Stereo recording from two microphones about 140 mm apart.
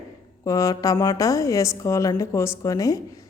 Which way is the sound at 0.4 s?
25° left (ahead or behind).